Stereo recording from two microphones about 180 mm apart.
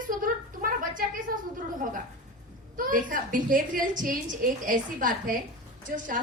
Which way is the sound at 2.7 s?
50° right (ahead or behind).